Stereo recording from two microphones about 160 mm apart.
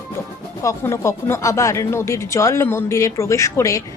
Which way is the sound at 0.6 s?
20° left (ahead or behind).